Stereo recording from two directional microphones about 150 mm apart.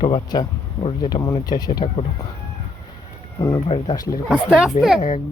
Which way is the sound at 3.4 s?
35° left (ahead or behind).